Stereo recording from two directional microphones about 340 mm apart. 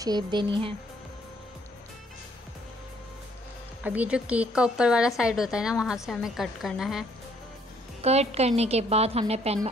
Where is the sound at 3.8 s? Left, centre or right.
Centre.